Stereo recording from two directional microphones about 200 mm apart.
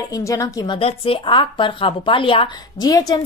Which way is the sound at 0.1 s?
15° left (ahead or behind).